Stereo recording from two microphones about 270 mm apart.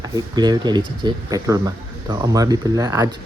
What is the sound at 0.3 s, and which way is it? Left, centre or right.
Speech, centre.